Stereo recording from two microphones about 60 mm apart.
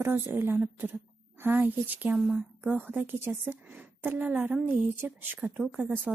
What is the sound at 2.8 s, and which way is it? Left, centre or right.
A woman's voice, right.